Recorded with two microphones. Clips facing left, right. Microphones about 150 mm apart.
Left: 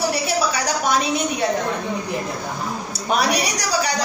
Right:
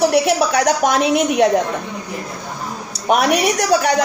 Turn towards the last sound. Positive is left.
turn(degrees=-55)  # may be behind; listen again after turning